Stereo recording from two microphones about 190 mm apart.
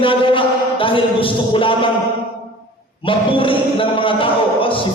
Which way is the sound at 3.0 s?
25° left (ahead or behind).